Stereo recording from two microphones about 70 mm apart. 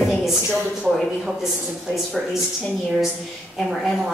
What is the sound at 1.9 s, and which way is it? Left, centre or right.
Speech, centre.